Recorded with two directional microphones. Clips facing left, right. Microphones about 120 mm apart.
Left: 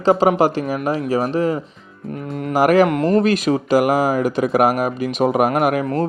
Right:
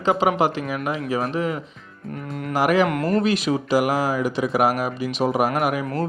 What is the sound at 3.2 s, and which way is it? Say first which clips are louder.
Speech: left 4 dB; 45° left (ahead or behind).